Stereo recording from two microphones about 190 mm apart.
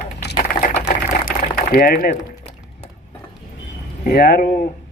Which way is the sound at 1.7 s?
50° left (ahead or behind).